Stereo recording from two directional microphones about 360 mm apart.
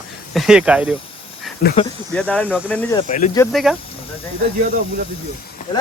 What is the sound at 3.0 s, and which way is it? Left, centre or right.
Speech, centre.